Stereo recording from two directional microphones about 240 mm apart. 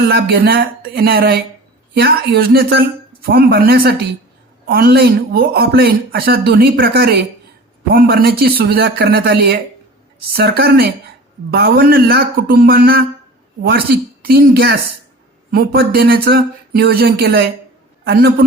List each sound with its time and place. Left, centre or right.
0.1 s a man's voice: right